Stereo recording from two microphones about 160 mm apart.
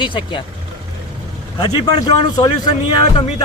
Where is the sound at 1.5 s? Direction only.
25° left (ahead or behind).